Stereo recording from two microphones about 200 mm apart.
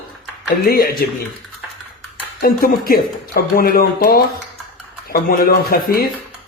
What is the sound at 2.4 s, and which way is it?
Speech, 50° left (ahead or behind).